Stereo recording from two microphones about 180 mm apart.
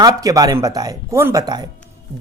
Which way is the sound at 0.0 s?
20° right (ahead or behind).